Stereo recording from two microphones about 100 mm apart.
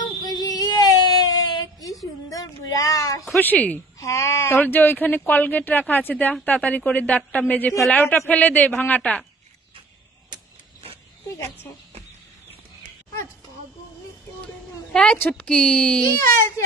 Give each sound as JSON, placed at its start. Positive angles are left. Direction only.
{"t": 0.2, "sound": "child singing", "side_deg": 40}
{"t": 2.2, "sound": "speech", "side_deg": 35}
{"t": 3.3, "sound": "speech", "side_deg": 15}
{"t": 4.0, "sound": "speech", "side_deg": 30}
{"t": 14.9, "sound": "speech", "side_deg": 10}